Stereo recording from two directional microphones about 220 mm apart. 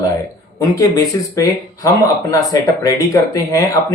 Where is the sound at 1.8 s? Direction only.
15° left (ahead or behind).